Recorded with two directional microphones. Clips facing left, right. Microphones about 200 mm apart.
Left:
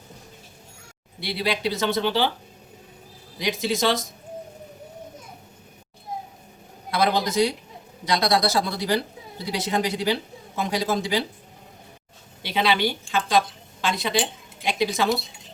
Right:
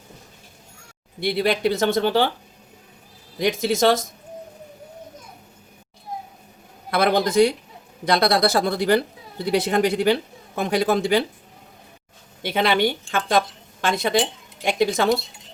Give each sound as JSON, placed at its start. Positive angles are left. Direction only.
{"t": 1.2, "sound": "speech", "side_deg": -55}
{"t": 3.3, "sound": "speech", "side_deg": -50}
{"t": 6.9, "sound": "a woman's voice", "side_deg": -60}
{"t": 12.4, "sound": "speech", "side_deg": -50}